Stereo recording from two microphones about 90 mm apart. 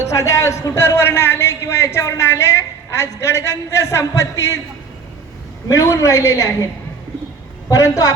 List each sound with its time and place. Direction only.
0.1 s a man's voice: 35° left (ahead or behind)
5.6 s a man's voice: 35° left (ahead or behind)
7.7 s a man's voice: 40° left (ahead or behind)